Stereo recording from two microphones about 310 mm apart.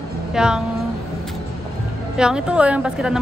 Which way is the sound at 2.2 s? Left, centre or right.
Centre.